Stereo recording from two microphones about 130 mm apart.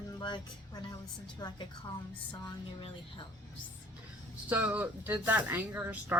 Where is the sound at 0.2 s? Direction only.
35° left (ahead or behind).